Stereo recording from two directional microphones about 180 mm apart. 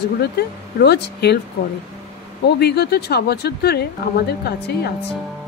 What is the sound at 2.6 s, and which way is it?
Speech, 65° left (ahead or behind).